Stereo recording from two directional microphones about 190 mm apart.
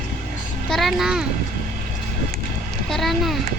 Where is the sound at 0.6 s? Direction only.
Centre (ahead or behind).